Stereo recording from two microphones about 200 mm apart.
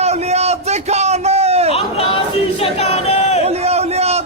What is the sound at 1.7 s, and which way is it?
Chatter, 30° left (ahead or behind).